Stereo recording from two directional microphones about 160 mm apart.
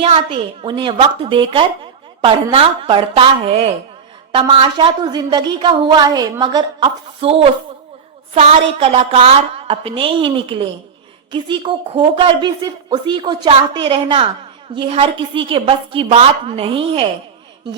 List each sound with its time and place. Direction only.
0.0 s a woman's voice: 35° right (ahead or behind)